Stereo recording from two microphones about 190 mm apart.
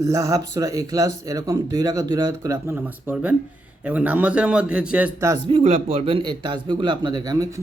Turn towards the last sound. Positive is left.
turn(degrees=-20)  # may be behind; listen again after turning